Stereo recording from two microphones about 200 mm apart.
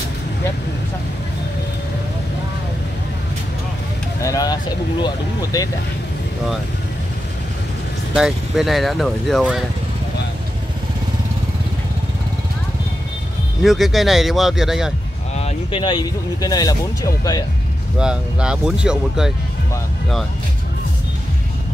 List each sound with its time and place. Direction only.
4.2 s vehicle: 15° left (ahead or behind)
5.0 s speech: 15° left (ahead or behind)
8.1 s speech: 5° right (ahead or behind)
13.6 s speech: centre (ahead or behind)
15.3 s speech: 30° left (ahead or behind)
17.9 s speech: 5° right (ahead or behind)